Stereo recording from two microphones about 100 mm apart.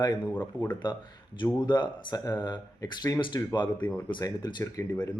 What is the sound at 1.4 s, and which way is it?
Speech, 50° left (ahead or behind).